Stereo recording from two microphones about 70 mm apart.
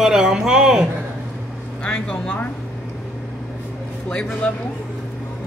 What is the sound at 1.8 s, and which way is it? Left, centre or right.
Speech, centre.